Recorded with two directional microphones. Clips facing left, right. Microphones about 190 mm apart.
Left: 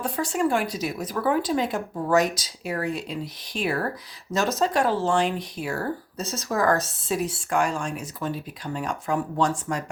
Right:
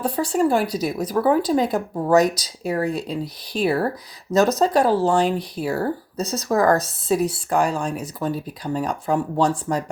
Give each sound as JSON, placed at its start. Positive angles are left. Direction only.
{"t": 0.0, "sound": "speech", "side_deg": -35}